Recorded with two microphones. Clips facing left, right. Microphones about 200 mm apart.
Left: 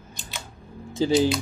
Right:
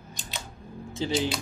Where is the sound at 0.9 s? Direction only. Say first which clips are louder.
Left 7 dB; 35° left (ahead or behind).